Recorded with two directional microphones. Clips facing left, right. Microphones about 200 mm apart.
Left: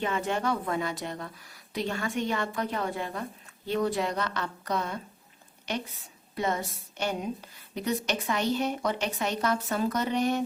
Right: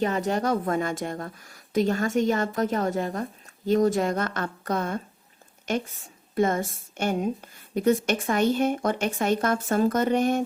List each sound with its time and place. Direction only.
0.0 s a woman's voice: 40° right (ahead or behind)